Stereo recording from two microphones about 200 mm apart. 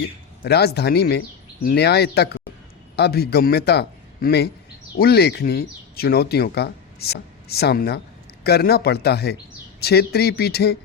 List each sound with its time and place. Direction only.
0.4 s a man's voice: 55° left (ahead or behind)